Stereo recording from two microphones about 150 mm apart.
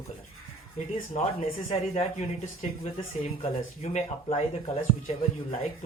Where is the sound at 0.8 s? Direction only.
50° left (ahead or behind).